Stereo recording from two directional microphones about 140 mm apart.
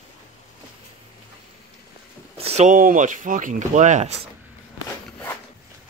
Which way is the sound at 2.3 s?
45° right (ahead or behind).